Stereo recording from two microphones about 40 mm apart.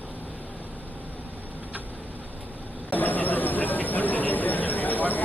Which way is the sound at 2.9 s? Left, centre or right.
Left.